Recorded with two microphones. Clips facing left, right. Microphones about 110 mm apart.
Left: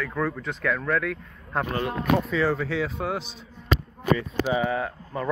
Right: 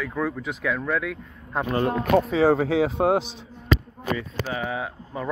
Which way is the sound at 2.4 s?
65° right (ahead or behind).